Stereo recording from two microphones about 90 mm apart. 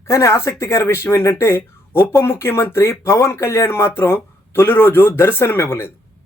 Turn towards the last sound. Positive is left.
turn(degrees=30)  # may be behind; listen again after turning